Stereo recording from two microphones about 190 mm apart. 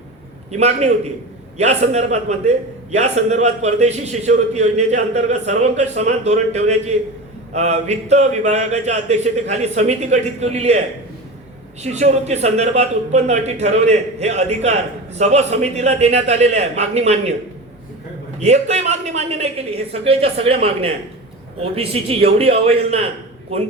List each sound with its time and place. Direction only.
0.5 s a man's voice: 35° right (ahead or behind)
11.8 s a man's voice: 35° right (ahead or behind)
18.3 s a man's voice: 35° right (ahead or behind)